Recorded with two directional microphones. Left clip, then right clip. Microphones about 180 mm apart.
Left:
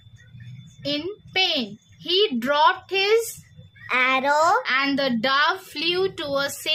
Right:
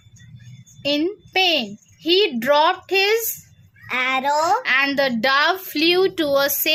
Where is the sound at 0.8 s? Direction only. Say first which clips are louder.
Right 6 dB; 30° right (ahead or behind).